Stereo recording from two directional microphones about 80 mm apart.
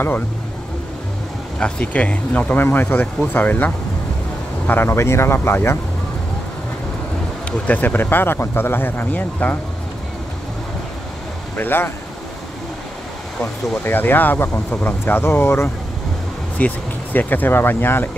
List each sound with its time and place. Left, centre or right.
1.6 s speech: centre; by 5.8 s left
7.6 s speech: left
11.5 s speech: left
13.4 s speech: left
16.5 s speech: centre